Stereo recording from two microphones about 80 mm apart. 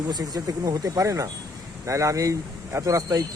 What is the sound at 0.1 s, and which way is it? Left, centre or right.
Speech, right.